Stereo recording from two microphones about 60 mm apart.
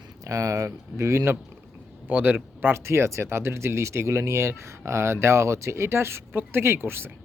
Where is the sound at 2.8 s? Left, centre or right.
Right.